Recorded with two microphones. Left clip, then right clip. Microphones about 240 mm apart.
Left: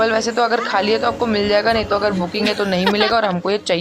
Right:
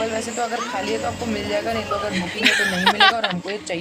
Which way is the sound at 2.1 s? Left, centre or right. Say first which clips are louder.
Right 1 dB; centre.